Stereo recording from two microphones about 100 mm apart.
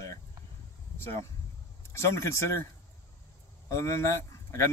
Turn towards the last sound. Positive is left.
turn(degrees=30)  # may be behind; listen again after turning